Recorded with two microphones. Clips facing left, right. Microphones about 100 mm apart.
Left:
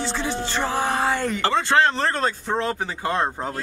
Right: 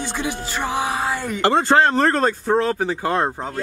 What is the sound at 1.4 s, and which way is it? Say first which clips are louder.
Speech: right 4 dB; 50° right (ahead or behind).